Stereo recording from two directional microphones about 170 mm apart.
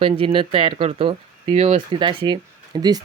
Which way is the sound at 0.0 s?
30° right (ahead or behind).